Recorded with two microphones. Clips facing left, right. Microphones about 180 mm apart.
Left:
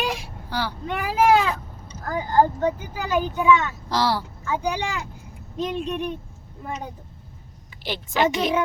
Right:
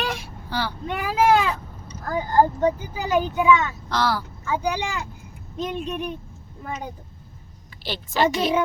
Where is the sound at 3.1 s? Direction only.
10° right (ahead or behind).